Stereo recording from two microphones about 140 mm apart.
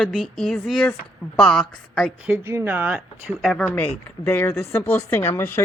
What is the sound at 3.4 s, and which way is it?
Speech, centre (ahead or behind).